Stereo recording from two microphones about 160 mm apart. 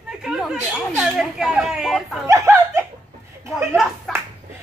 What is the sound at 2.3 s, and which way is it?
Snicker, 20° right (ahead or behind).